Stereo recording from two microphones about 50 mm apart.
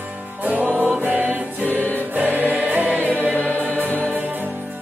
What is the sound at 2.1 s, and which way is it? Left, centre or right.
Choir, right.